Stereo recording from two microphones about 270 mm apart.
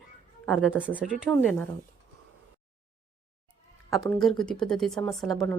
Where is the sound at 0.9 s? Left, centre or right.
Centre.